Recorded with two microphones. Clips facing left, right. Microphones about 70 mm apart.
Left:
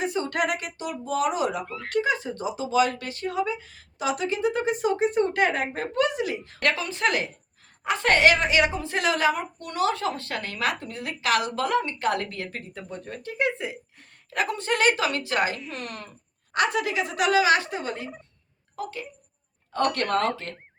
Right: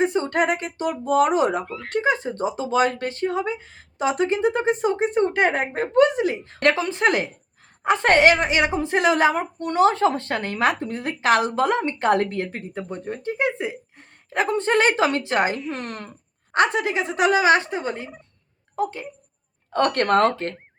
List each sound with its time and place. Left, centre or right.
0.0 s a woman's voice: right
1.6 s speech: centre
1.9 s a woman's voice: right
19.7 s speech: right